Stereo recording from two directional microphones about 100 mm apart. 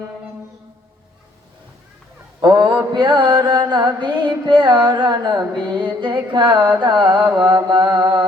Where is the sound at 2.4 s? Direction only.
40° right (ahead or behind).